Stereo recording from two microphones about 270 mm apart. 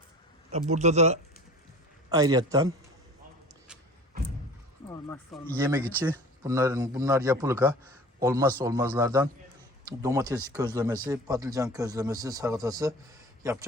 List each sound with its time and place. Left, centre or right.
0.5 s a man's voice: right
4.9 s speech: centre
5.5 s a man's voice: centre